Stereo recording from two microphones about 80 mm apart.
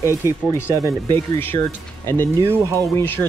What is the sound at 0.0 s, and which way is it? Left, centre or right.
Speech, right.